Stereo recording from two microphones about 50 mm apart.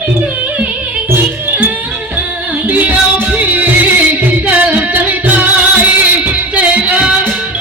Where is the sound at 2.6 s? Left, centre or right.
Right.